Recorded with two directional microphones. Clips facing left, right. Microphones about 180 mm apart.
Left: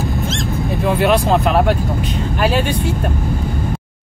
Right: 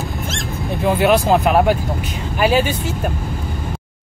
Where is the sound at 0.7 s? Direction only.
Centre (ahead or behind).